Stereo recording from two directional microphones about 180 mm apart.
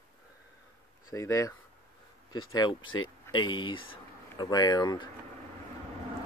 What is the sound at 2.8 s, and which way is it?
Speech, 90° left.